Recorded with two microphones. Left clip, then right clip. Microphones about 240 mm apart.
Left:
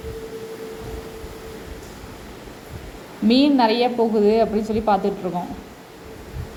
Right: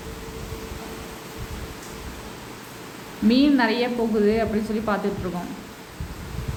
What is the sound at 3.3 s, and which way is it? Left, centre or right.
A woman's voice, centre.